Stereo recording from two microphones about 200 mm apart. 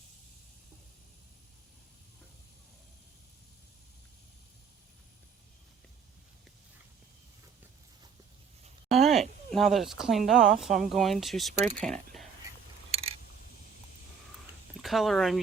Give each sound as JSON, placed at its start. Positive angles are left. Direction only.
{"t": 8.9, "sound": "a sound", "side_deg": 0}
{"t": 9.5, "sound": "speech", "side_deg": 0}
{"t": 14.8, "sound": "speech", "side_deg": 0}